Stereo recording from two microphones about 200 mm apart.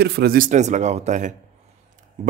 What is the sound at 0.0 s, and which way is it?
Speech, 55° right (ahead or behind).